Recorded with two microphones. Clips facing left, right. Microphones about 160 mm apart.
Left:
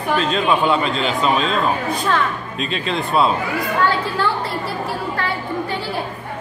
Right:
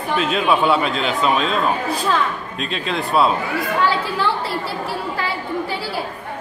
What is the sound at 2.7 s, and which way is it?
Speech, centre (ahead or behind).